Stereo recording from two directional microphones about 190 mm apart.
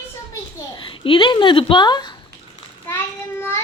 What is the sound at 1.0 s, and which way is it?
A child's voice, 25° left (ahead or behind).